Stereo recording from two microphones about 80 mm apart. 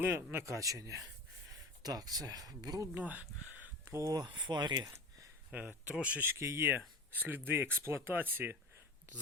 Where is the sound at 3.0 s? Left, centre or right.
Centre.